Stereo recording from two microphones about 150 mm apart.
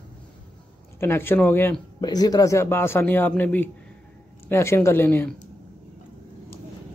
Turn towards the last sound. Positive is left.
turn(degrees=15)  # may be behind; listen again after turning